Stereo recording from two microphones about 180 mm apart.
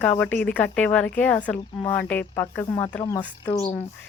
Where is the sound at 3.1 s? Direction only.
25° left (ahead or behind).